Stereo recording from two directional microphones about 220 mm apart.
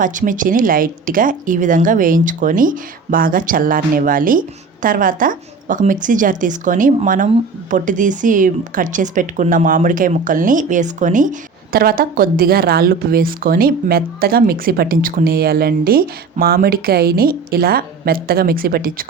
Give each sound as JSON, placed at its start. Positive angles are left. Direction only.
{"t": 0.0, "sound": "a woman's voice", "side_deg": -35}